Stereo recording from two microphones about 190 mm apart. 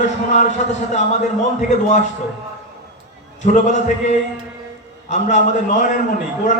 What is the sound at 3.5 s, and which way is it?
A man's voice, 40° left (ahead or behind).